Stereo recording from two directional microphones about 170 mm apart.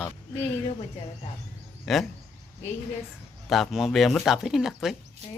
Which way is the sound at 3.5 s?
Centre (ahead or behind).